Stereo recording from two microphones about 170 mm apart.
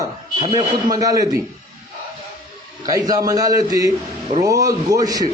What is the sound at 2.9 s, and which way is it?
A man's voice, 20° right (ahead or behind).